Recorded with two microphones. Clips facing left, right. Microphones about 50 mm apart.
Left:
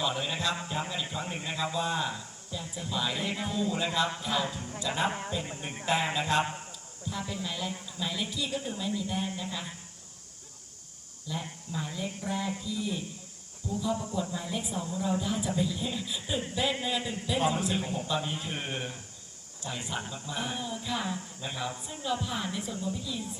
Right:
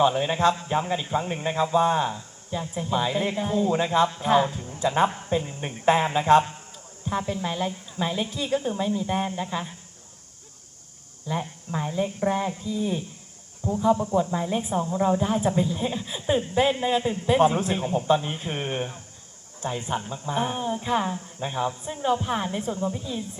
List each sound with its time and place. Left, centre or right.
0.0 s a man's voice: right
11.3 s speech: right